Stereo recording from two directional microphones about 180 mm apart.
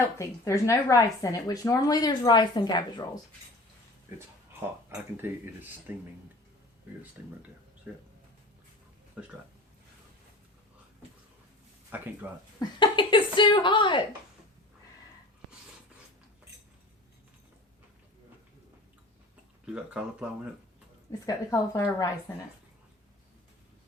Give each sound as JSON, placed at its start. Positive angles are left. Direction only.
{"t": 0.2, "sound": "a woman's voice", "side_deg": 15}
{"t": 4.9, "sound": "speech", "side_deg": -15}
{"t": 7.9, "sound": "speech", "side_deg": -5}
{"t": 9.2, "sound": "speech", "side_deg": -5}
{"t": 11.9, "sound": "speech", "side_deg": -10}
{"t": 12.5, "sound": "a woman's voice", "side_deg": 25}
{"t": 19.6, "sound": "speech", "side_deg": -5}
{"t": 21.1, "sound": "a woman's voice", "side_deg": 20}